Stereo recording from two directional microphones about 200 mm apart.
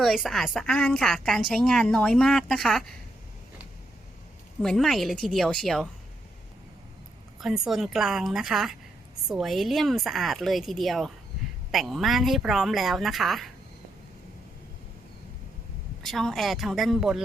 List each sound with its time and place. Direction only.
0.0 s a woman's voice: centre (ahead or behind)
4.6 s a woman's voice: centre (ahead or behind)
7.4 s a woman's voice: centre (ahead or behind)
16.0 s a woman's voice: centre (ahead or behind)